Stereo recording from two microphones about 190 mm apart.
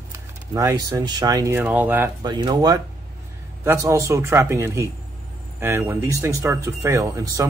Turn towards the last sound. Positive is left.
turn(degrees=-15)  # may be behind; listen again after turning